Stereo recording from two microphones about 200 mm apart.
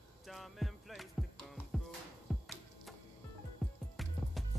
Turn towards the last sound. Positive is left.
turn(degrees=0)  # may be behind; listen again after turning